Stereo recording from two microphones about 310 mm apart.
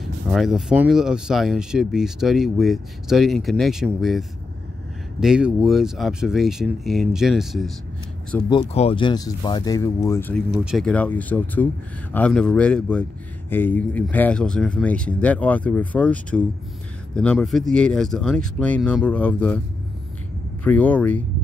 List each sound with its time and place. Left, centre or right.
0.3 s speech: centre
8.5 s speech: centre
20.6 s speech: centre